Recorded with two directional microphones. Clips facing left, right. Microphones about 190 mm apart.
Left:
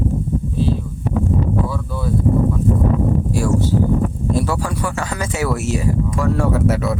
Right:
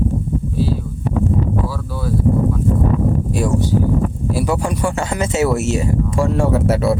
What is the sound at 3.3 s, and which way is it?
Speech, 20° right (ahead or behind).